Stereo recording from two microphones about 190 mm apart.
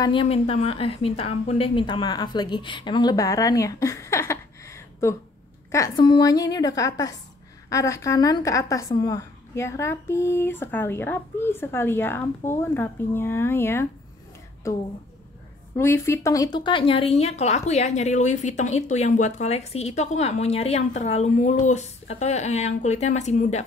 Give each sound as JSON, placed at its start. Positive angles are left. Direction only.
{"t": 0.0, "sound": "a woman's voice", "side_deg": 25}